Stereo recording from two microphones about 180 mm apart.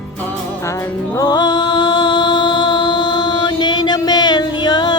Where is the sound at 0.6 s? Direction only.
15° left (ahead or behind).